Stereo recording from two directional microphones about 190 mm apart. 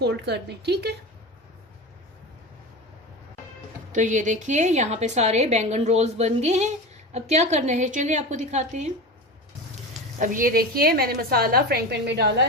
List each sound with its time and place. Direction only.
0.0 s a woman's voice: 60° right (ahead or behind)
3.9 s a woman's voice: 40° right (ahead or behind)
10.2 s a woman's voice: 45° right (ahead or behind); by 12.5 s 65° right (ahead or behind)